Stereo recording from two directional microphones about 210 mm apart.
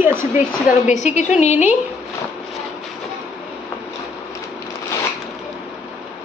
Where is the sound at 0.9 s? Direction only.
35° left (ahead or behind).